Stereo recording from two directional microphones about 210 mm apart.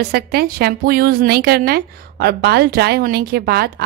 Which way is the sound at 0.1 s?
45° right (ahead or behind).